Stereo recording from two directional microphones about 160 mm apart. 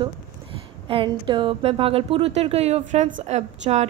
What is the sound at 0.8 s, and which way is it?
A woman's voice, 35° right (ahead or behind).